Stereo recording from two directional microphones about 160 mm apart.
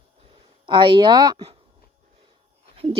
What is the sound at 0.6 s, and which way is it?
Speech, 30° right (ahead or behind).